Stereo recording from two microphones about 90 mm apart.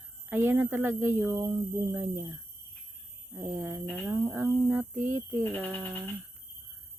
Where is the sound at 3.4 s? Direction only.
30° right (ahead or behind).